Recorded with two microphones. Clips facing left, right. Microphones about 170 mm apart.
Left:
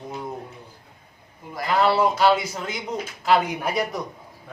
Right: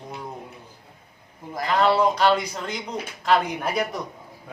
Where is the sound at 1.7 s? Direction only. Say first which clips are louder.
Even; 5° left (ahead or behind).